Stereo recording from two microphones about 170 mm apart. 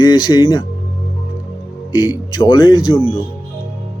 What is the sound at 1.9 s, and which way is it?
Speech, 25° left (ahead or behind).